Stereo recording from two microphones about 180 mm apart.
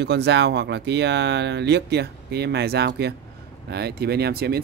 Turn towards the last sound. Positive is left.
turn(degrees=-60)  # may be behind; listen again after turning